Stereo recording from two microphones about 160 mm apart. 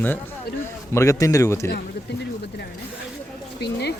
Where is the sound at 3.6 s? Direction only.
90° left.